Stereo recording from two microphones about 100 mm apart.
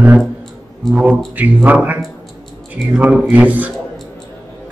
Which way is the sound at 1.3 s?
15° right (ahead or behind).